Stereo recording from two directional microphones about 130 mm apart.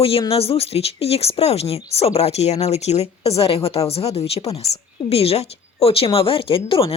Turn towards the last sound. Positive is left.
turn(degrees=45)  # may be behind; listen again after turning